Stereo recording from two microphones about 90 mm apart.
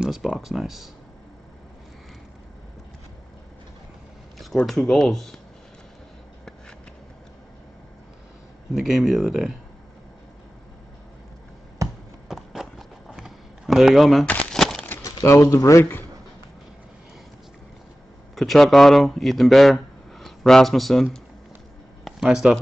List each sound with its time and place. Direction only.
0.0 s speech: 5° right (ahead or behind)
4.6 s speech: 5° left (ahead or behind)
8.7 s speech: centre (ahead or behind)
11.8 s a sound: 40° right (ahead or behind)
12.3 s clip-clop: 5° right (ahead or behind)
14.2 s a sound: 15° left (ahead or behind)
15.0 s speech: 40° left (ahead or behind)
18.3 s speech: centre (ahead or behind)
22.0 s a sound: 5° right (ahead or behind)